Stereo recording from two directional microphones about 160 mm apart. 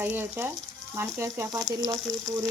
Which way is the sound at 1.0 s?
15° right (ahead or behind).